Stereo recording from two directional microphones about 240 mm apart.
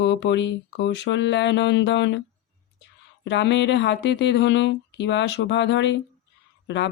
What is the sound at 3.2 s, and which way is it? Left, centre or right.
Speech, left.